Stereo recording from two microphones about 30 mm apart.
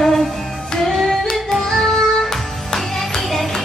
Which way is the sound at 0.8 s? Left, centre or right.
Centre.